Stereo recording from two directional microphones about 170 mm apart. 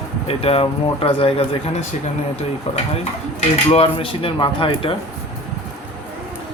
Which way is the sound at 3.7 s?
30° left (ahead or behind).